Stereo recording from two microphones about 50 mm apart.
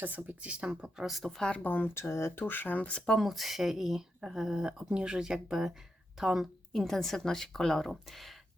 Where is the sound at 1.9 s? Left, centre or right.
Left.